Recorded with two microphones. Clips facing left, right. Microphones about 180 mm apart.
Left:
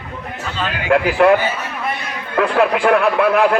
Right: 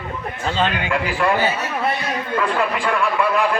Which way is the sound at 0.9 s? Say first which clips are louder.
Left 8 dB; 65° left (ahead or behind).